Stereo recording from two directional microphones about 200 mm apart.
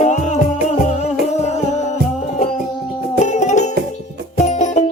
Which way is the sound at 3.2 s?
35° left (ahead or behind).